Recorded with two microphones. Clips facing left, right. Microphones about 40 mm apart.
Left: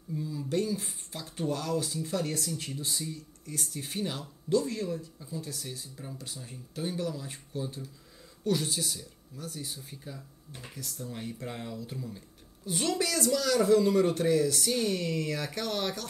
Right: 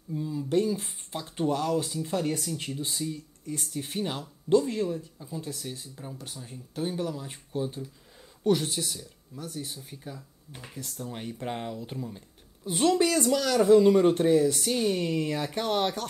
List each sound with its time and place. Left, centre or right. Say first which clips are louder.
0.1 s speech: right 5 dB; centre